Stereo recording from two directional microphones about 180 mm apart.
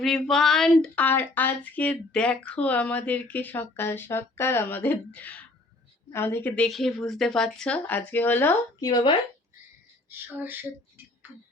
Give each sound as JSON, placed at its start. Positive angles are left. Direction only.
{"t": 0.0, "sound": "speech", "side_deg": 0}
{"t": 6.7, "sound": "speech", "side_deg": 0}
{"t": 8.8, "sound": "speech", "side_deg": 25}
{"t": 10.1, "sound": "speech", "side_deg": -10}